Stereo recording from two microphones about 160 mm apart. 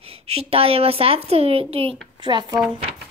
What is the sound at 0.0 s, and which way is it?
A woman's voice, 40° right (ahead or behind).